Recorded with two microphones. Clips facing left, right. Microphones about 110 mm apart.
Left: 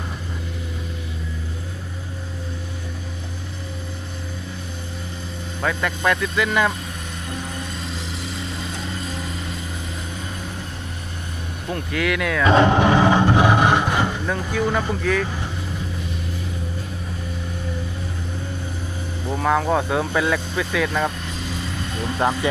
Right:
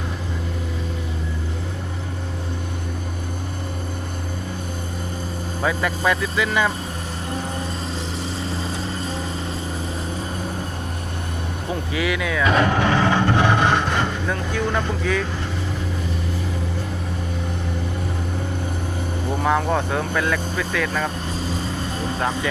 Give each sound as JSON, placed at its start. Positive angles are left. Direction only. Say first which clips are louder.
{"t": 5.6, "sound": "speech", "louder": "even", "side_deg": -5}
{"t": 7.5, "sound": "vehicle", "louder": "right 3 dB", "side_deg": -35}
{"t": 11.7, "sound": "speech", "louder": "left 1 dB", "side_deg": -5}
{"t": 12.5, "sound": "speech", "louder": "left 4 dB", "side_deg": 25}
{"t": 19.3, "sound": "speech", "louder": "left 1 dB", "side_deg": 0}
{"t": 21.2, "sound": "vehicle", "louder": "right 3 dB", "side_deg": -35}